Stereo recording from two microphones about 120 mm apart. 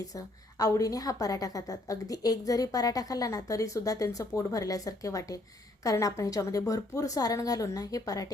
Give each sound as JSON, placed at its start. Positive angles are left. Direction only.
{"t": 0.1, "sound": "a woman's voice", "side_deg": 30}